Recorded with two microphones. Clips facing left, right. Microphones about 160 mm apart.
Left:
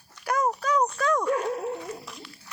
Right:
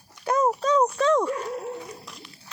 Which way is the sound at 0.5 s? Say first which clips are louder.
Right 4 dB; 25° right (ahead or behind).